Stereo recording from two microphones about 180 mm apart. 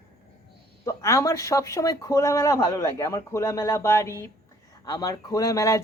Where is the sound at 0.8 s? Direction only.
15° left (ahead or behind).